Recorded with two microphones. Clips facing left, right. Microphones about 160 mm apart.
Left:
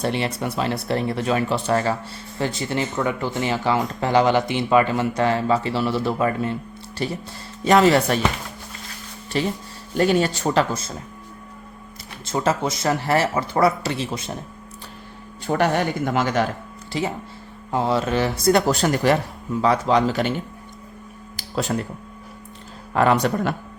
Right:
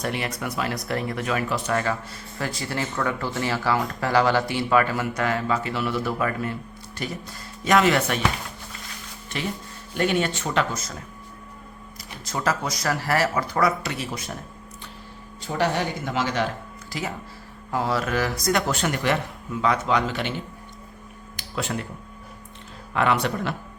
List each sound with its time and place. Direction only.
0.0 s speech: 30° left (ahead or behind)
9.3 s speech: 35° left (ahead or behind)
12.2 s speech: 25° left (ahead or behind)
15.4 s speech: 55° left (ahead or behind)
16.9 s speech: 25° left (ahead or behind)
21.5 s speech: 35° left (ahead or behind)
23.0 s speech: 40° left (ahead or behind)